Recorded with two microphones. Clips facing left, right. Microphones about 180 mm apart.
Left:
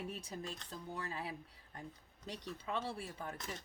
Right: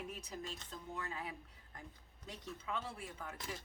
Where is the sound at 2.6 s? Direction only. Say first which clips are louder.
Left 3 dB; 35° left (ahead or behind).